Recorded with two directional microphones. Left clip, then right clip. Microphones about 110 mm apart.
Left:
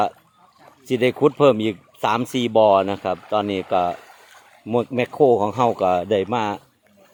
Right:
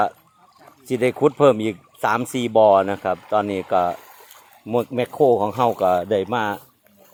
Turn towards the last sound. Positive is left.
turn(degrees=20)  # may be behind; listen again after turning